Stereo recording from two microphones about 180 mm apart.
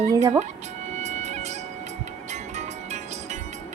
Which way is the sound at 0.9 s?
40° right (ahead or behind).